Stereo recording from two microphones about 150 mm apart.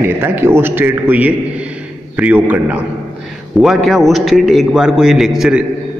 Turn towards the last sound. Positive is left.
turn(degrees=-5)  # may be behind; listen again after turning